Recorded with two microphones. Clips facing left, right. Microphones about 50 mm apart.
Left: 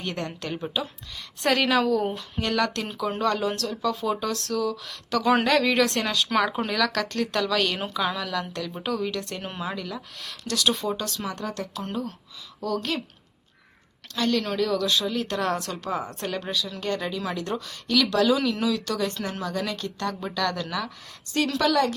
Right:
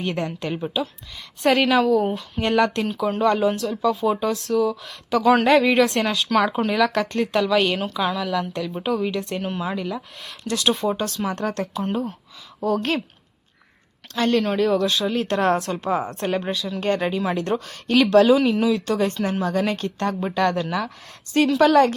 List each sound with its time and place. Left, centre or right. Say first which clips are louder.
0.0 s speech: right 5 dB; centre
2.4 s speech: right 6 dB; right; by 5.5 s centre
5.5 s speech: right 5 dB; centre
7.9 s speech: right 4 dB; centre
9.4 s speech: right 5 dB; centre
9.7 s a woman's voice: right 6 dB; right
14.2 s speech: right 5 dB; right